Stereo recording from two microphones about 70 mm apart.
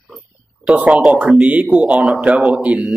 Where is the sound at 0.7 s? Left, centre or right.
Right.